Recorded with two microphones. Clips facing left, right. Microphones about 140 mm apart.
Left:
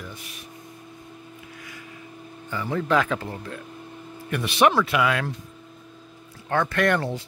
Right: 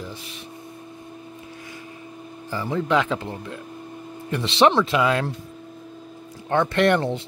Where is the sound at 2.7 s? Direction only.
20° right (ahead or behind).